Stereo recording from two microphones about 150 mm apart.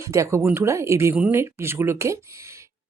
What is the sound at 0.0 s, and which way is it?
Speech, 20° right (ahead or behind).